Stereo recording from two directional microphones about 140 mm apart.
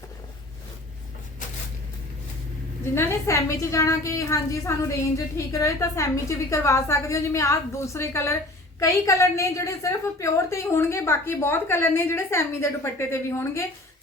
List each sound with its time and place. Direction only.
2.9 s a woman's voice: 20° left (ahead or behind)